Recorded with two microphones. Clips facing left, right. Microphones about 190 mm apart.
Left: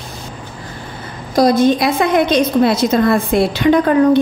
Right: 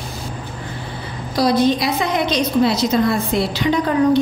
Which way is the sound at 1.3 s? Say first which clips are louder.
Left 4 dB; 45° left (ahead or behind).